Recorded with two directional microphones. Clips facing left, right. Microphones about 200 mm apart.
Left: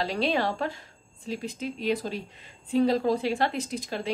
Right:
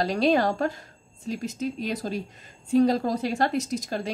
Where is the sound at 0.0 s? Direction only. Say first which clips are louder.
Right 5 dB; 45° right (ahead or behind).